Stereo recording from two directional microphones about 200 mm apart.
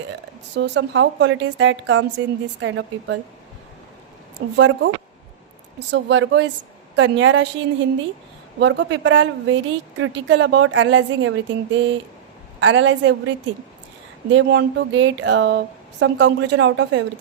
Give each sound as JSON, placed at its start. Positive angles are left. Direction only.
{"t": 0.5, "sound": "a woman's voice", "side_deg": -60}
{"t": 4.4, "sound": "speech", "side_deg": -65}
{"t": 5.9, "sound": "a woman's voice", "side_deg": -60}
{"t": 8.5, "sound": "a woman's voice", "side_deg": -65}
{"t": 14.3, "sound": "speech", "side_deg": -65}